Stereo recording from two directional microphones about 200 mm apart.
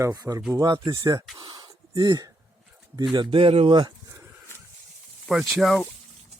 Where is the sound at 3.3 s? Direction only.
30° right (ahead or behind).